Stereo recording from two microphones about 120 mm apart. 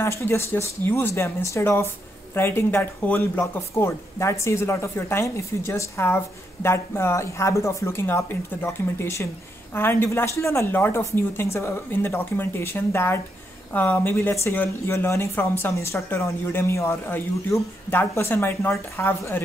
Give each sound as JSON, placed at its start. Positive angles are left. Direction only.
{"t": 0.0, "sound": "speech", "side_deg": 20}